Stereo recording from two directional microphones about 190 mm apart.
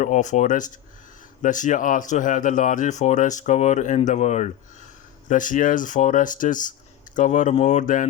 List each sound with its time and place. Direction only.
0.0 s speech: 40° left (ahead or behind)